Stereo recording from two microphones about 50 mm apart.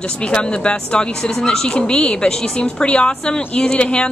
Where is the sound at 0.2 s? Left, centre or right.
Left.